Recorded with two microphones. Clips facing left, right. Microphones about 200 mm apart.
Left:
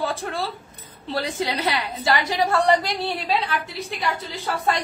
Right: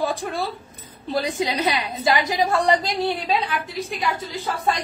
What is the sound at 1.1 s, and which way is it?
A woman's voice, 15° right (ahead or behind).